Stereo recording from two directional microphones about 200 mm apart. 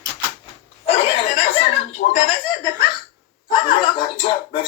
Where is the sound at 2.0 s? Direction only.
35° left (ahead or behind).